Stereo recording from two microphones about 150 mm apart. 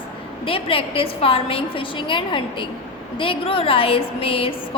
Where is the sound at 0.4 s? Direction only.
40° left (ahead or behind).